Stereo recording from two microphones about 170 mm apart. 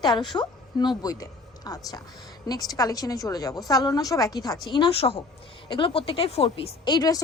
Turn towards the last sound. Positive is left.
turn(degrees=25)  # may be behind; listen again after turning